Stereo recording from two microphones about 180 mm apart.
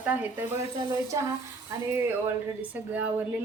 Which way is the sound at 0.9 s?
20° right (ahead or behind).